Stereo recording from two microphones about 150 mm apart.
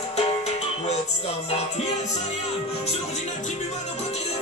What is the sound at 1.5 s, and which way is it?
Speech, 45° left (ahead or behind).